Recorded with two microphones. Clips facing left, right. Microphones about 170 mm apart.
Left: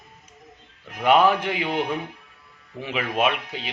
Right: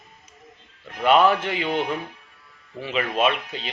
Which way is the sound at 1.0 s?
15° left (ahead or behind).